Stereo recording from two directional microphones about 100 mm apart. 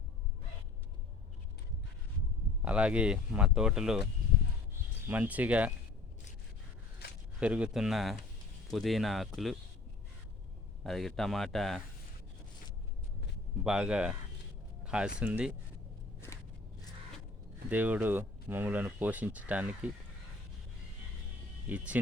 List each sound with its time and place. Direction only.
2.6 s speech: 15° right (ahead or behind)
5.0 s speech: 15° right (ahead or behind)
7.3 s speech: 10° right (ahead or behind)
10.8 s speech: 5° left (ahead or behind)
13.7 s speech: 10° right (ahead or behind)
17.7 s speech: 15° right (ahead or behind)
21.7 s speech: 15° right (ahead or behind)